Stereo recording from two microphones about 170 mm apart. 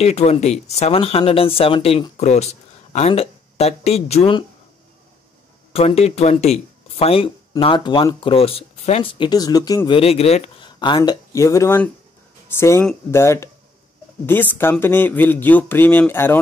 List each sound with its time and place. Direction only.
0.0 s speech: 40° left (ahead or behind)
5.7 s speech: 35° left (ahead or behind)
9.9 s speech: 35° left (ahead or behind)
10.6 s speech: 25° left (ahead or behind); by 16.3 s 10° left (ahead or behind)